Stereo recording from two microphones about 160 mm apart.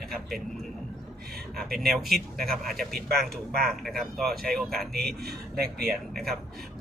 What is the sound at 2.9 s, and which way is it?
Speech, 75° right (ahead or behind).